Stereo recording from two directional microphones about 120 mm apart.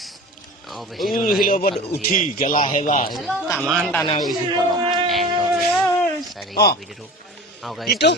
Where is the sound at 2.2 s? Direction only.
90° left.